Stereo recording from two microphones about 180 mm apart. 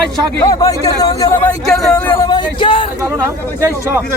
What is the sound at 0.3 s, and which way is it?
Speech, 20° left (ahead or behind).